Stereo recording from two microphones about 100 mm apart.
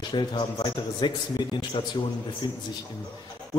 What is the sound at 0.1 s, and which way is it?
A man's voice, 50° left (ahead or behind).